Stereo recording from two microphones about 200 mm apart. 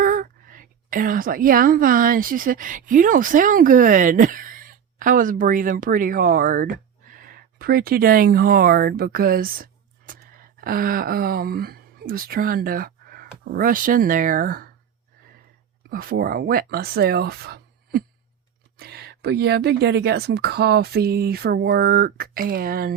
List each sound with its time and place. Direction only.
0.0 s a woman's voice: 45° right (ahead or behind)
15.9 s speech: 45° right (ahead or behind)